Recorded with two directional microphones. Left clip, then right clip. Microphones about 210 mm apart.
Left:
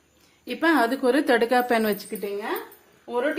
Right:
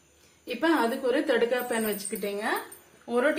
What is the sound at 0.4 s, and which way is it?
A woman's voice, 45° left (ahead or behind).